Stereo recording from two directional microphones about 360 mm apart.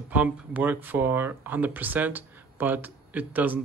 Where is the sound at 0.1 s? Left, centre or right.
Centre.